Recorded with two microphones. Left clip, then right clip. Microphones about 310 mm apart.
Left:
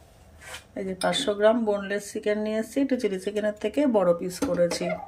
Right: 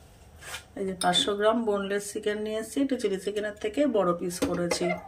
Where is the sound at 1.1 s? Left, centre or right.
Centre.